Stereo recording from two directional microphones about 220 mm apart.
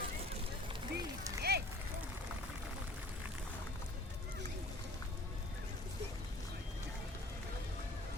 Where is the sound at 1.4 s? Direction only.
45° right (ahead or behind).